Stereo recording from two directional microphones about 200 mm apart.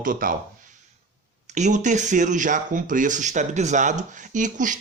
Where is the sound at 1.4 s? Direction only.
35° right (ahead or behind).